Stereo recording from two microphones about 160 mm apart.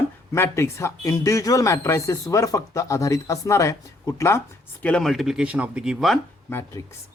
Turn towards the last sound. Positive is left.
turn(degrees=15)  # may be behind; listen again after turning